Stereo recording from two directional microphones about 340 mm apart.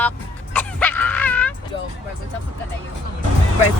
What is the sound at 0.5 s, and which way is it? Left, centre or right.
Music, centre.